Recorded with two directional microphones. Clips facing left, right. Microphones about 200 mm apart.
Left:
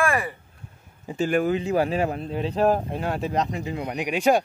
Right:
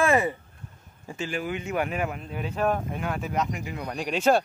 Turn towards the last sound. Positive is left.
turn(degrees=15)  # may be behind; listen again after turning